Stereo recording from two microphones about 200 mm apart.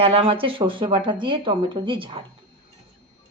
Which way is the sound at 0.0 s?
30° right (ahead or behind).